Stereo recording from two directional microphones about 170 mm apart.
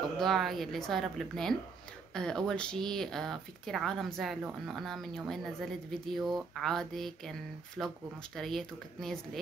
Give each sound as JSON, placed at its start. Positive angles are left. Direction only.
{"t": 0.2, "sound": "speech", "side_deg": 0}